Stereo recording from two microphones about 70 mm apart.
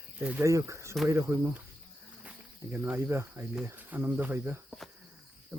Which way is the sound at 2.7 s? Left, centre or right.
Right.